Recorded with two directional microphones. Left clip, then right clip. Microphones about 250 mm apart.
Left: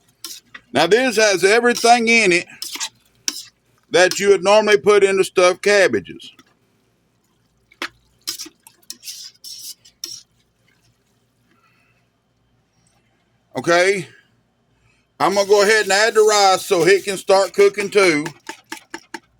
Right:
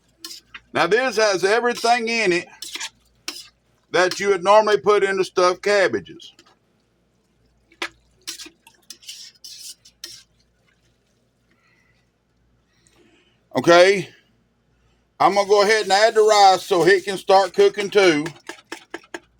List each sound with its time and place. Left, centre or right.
0.7 s speech: left
3.9 s speech: left
13.5 s a man's voice: centre
15.2 s a man's voice: centre